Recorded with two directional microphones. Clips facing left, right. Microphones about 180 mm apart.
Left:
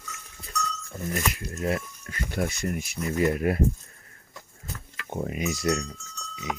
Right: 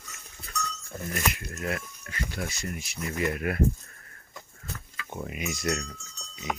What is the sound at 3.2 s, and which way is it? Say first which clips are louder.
Speech: left 5 dB; 30° left (ahead or behind).